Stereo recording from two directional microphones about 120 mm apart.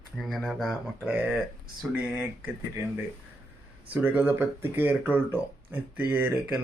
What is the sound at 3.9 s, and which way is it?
Speech, 15° right (ahead or behind).